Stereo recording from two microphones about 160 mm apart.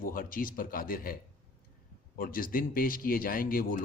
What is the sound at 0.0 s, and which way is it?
Speech, 60° left (ahead or behind).